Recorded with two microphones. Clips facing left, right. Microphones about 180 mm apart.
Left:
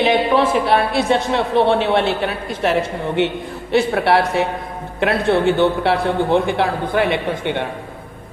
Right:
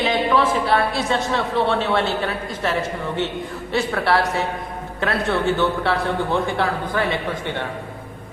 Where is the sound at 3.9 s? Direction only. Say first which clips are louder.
Left 4 dB; 25° left (ahead or behind).